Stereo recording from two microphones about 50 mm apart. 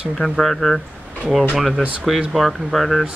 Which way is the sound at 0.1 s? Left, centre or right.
Centre.